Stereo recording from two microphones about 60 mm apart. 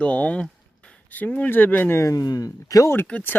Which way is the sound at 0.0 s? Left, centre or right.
Left.